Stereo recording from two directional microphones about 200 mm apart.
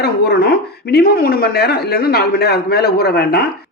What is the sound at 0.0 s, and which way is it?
Speech, 55° left (ahead or behind).